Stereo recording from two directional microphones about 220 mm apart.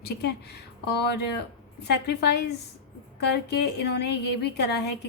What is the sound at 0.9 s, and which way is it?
A woman's voice, 50° left (ahead or behind).